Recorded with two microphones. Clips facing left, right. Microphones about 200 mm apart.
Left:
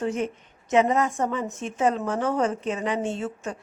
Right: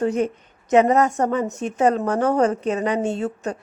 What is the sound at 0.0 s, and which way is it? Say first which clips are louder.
A woman's voice: right 6 dB; 40° right (ahead or behind).